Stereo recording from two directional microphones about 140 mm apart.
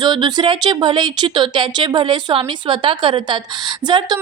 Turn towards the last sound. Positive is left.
turn(degrees=-30)  # may be behind; listen again after turning